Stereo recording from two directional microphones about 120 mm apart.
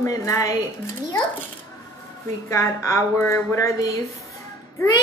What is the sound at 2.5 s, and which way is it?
A woman's voice, 25° left (ahead or behind).